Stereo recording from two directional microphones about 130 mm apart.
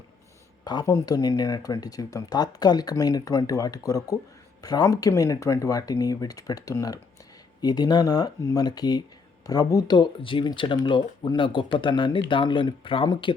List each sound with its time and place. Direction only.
0.6 s speech: 30° left (ahead or behind)